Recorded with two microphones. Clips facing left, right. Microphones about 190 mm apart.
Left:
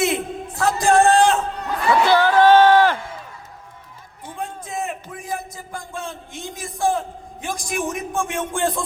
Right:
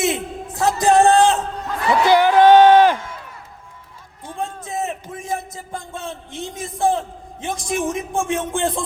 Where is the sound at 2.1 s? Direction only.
15° right (ahead or behind).